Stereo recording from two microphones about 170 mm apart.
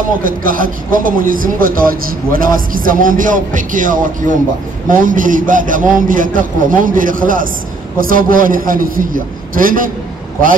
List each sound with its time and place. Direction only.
0.2 s a man's voice: 55° right (ahead or behind)